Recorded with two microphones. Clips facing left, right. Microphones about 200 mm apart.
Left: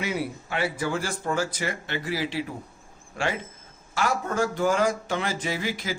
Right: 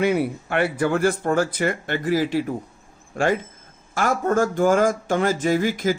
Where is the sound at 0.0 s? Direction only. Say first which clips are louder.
Right 9 dB; 55° right (ahead or behind).